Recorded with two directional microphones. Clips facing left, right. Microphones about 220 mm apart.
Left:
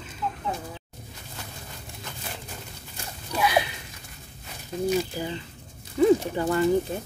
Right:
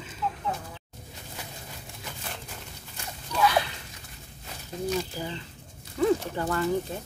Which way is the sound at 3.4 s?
15° left (ahead or behind).